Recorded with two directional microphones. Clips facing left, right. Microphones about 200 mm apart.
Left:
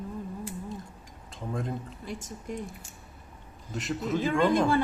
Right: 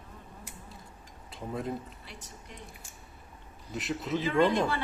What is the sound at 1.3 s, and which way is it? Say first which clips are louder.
Speech: left 1 dB; 5° right (ahead or behind).